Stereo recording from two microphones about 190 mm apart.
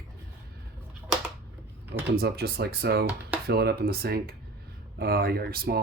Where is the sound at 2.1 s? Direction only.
55° right (ahead or behind).